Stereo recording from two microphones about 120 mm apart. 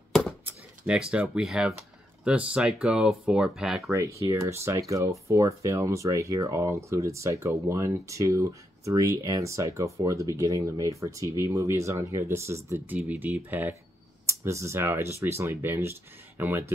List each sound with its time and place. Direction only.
0.5 s a sound: 10° right (ahead or behind)
1.1 s speech: 10° right (ahead or behind)
4.2 s speech: 25° right (ahead or behind)